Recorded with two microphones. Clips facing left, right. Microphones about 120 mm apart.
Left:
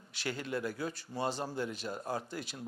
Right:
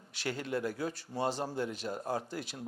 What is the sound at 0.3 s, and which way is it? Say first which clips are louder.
Speech: right 2 dB; 50° right (ahead or behind).